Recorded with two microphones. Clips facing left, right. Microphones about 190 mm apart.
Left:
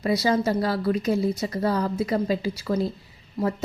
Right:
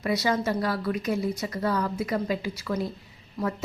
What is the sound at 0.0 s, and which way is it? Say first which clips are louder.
A woman's voice: left 3 dB; 30° left (ahead or behind).